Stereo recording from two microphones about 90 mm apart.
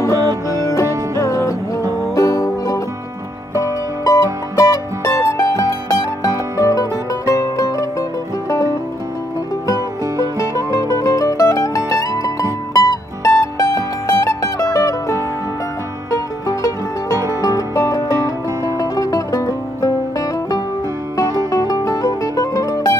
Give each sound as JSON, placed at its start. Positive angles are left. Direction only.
{"t": 0.1, "sound": "music", "side_deg": -40}
{"t": 1.2, "sound": "music", "side_deg": 35}
{"t": 4.0, "sound": "music", "side_deg": 40}
{"t": 6.3, "sound": "music", "side_deg": -30}
{"t": 6.7, "sound": "music", "side_deg": 40}
{"t": 10.5, "sound": "mandolin", "side_deg": 35}
{"t": 12.7, "sound": "music", "side_deg": 40}